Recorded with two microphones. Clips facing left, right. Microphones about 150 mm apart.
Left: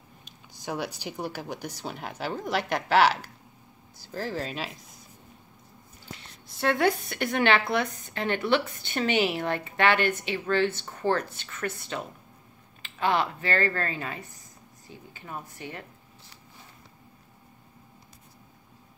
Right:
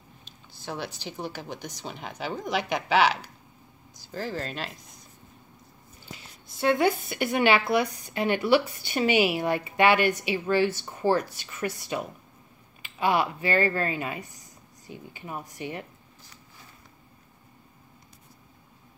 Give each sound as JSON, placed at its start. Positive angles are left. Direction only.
{"t": 0.5, "sound": "speech", "side_deg": 10}
{"t": 6.1, "sound": "a woman's voice", "side_deg": 0}